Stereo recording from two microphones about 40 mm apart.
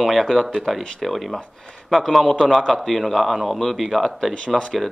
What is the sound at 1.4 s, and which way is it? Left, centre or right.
A man's voice, left.